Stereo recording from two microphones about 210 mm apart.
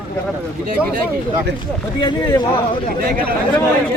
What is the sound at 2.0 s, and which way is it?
Speech, 20° left (ahead or behind).